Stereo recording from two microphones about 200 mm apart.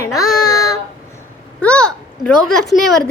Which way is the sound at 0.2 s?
20° left (ahead or behind).